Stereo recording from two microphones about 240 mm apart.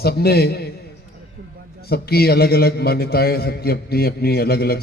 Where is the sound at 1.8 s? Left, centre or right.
Left.